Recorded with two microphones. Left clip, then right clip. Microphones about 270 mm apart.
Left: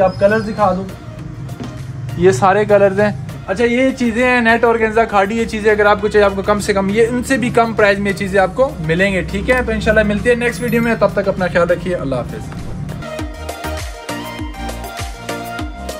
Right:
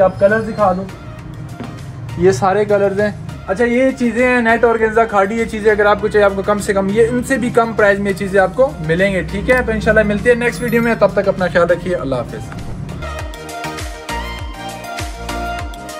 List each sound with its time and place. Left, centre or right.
0.0 s a man's voice: centre
2.4 s speech: centre
3.4 s a man's voice: centre